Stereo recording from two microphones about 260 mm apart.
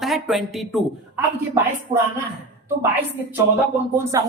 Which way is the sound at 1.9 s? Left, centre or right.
Right.